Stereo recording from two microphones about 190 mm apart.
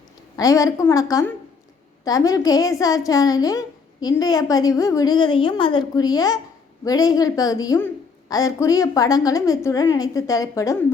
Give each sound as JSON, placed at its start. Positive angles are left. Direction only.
{"t": 0.3, "sound": "a woman's voice", "side_deg": 15}